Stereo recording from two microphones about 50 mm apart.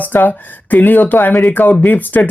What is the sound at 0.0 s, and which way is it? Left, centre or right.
Speech, left.